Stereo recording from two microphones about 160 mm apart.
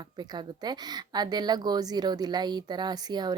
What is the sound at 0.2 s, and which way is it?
A woman's voice, 25° right (ahead or behind).